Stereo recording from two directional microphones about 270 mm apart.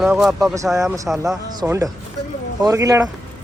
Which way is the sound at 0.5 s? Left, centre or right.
Centre.